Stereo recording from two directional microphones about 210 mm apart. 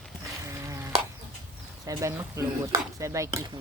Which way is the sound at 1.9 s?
15° right (ahead or behind).